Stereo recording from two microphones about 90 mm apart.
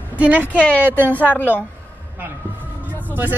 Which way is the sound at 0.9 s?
20° left (ahead or behind).